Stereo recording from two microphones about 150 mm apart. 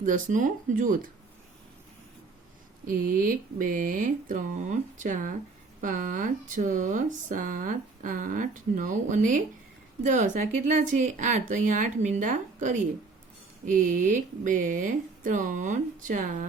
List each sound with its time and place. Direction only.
0.0 s speech: 60° right (ahead or behind)
2.8 s speech: 70° right (ahead or behind)